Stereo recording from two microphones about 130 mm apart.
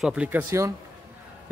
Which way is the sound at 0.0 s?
10° right (ahead or behind).